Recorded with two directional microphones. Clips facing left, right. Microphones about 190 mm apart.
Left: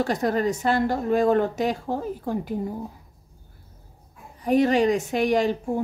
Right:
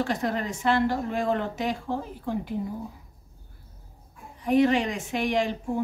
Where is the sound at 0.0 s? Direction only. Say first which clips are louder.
Left 5 dB; 40° left (ahead or behind).